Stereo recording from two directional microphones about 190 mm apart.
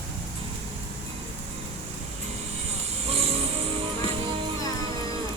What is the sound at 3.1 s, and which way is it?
Music, 30° right (ahead or behind).